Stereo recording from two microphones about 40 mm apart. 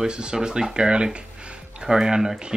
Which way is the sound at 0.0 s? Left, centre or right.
Centre.